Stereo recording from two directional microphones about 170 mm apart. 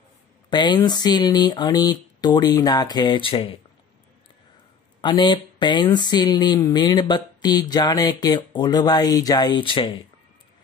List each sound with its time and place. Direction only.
0.5 s speech: 25° left (ahead or behind)
5.0 s speech: 25° left (ahead or behind)